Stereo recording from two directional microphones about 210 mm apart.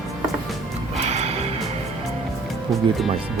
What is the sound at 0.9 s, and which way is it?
Music, 30° right (ahead or behind).